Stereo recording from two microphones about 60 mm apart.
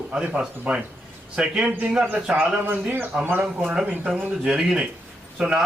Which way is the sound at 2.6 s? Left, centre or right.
Right.